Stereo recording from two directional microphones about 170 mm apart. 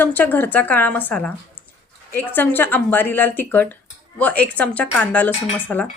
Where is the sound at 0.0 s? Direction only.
10° left (ahead or behind).